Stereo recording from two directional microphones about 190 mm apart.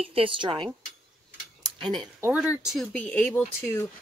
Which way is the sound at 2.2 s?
10° right (ahead or behind).